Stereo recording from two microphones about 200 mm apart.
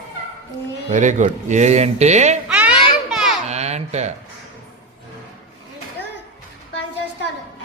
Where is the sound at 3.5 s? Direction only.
35° right (ahead or behind).